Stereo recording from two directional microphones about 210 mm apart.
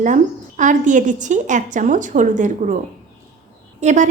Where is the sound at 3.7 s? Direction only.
35° right (ahead or behind).